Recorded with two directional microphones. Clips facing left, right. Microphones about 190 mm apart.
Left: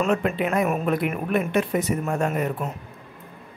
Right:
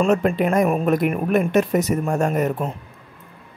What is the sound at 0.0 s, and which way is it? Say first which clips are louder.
Speech: right 4 dB; 40° right (ahead or behind).